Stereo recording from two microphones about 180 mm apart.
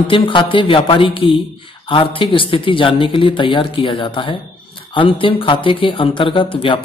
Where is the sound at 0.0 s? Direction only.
30° left (ahead or behind).